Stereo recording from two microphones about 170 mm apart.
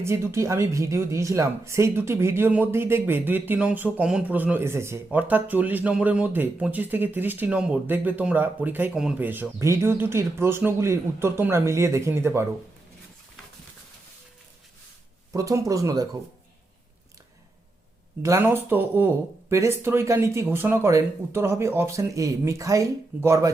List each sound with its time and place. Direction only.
0.0 s speech: 15° right (ahead or behind)
15.3 s speech: 20° right (ahead or behind)
18.2 s speech: 15° right (ahead or behind)